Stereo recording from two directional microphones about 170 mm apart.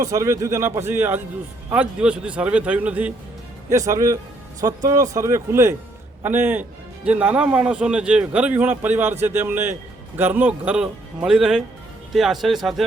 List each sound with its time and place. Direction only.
0.0 s a man's voice: 15° right (ahead or behind)
3.7 s a man's voice: 20° right (ahead or behind); by 12.8 s centre (ahead or behind)